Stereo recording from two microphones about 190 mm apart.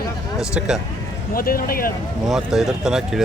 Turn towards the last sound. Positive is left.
turn(degrees=0)  # may be behind; listen again after turning